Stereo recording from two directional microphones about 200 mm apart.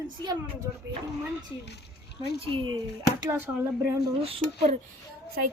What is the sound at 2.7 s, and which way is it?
Speech, 15° right (ahead or behind).